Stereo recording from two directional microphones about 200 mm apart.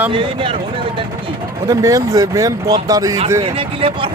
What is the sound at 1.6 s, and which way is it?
Speech, 15° right (ahead or behind).